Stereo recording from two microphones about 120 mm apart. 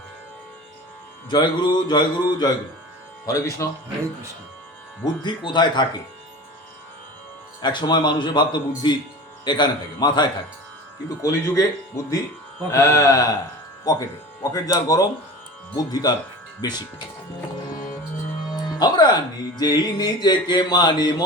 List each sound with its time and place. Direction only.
1.3 s speech: 35° left (ahead or behind)
3.2 s mantra: 30° left (ahead or behind)
5.2 s speech: 40° left (ahead or behind)
7.6 s speech: 40° left (ahead or behind)
11.2 s mantra: 25° left (ahead or behind)
12.7 s mantra: 25° left (ahead or behind)
13.9 s speech: 30° left (ahead or behind)
14.5 s mantra: 30° left (ahead or behind)
15.7 s speech: 30° left (ahead or behind)
18.5 s speech: 35° left (ahead or behind)